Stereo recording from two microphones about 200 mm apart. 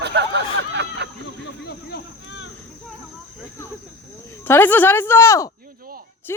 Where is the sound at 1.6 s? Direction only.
60° left (ahead or behind).